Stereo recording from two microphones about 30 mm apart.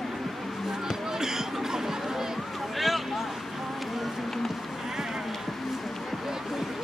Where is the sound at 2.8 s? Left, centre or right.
Centre.